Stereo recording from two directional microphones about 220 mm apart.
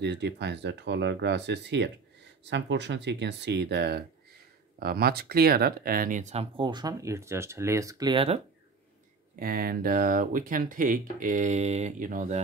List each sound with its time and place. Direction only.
0.0 s speech: 50° right (ahead or behind); by 8.4 s 25° right (ahead or behind)
9.4 s speech: 40° right (ahead or behind)